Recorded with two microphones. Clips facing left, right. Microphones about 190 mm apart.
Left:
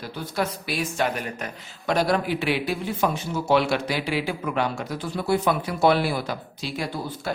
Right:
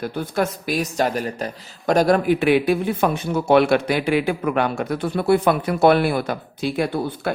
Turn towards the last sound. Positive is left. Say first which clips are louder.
# right 6 dB
turn(degrees=-55)  # may be behind; listen again after turning